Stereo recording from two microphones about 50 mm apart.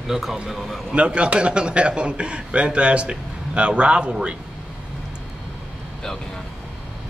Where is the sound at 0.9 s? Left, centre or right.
Right.